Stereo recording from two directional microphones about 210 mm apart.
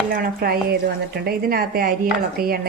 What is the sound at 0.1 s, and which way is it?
A woman's voice, 45° right (ahead or behind).